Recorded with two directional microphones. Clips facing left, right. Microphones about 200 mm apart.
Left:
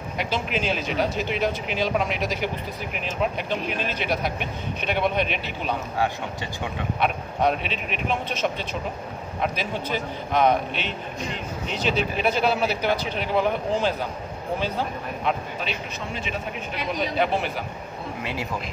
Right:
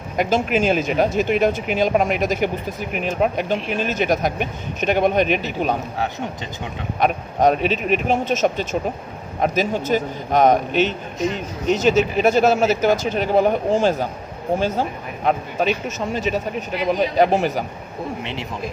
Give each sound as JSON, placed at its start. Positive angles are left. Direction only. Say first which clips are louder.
{"t": 0.2, "sound": "speech", "louder": "right 8 dB", "side_deg": -45}
{"t": 7.0, "sound": "speech", "louder": "right 6 dB", "side_deg": -40}
{"t": 18.2, "sound": "speech", "louder": "right 1 dB", "side_deg": -25}